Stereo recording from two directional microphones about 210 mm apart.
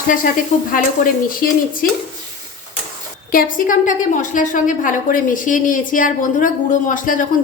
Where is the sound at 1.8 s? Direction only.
45° left (ahead or behind).